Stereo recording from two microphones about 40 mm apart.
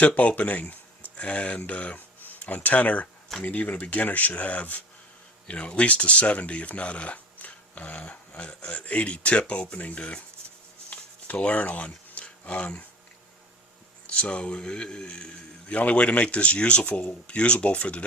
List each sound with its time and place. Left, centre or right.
0.0 s a man's voice: left
11.3 s speech: left
14.1 s a man's voice: left